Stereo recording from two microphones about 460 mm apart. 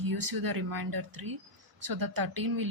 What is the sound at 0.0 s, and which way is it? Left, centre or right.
Speech, right.